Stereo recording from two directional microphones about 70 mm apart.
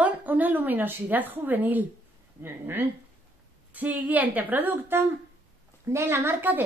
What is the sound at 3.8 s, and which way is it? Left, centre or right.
A woman's voice, right.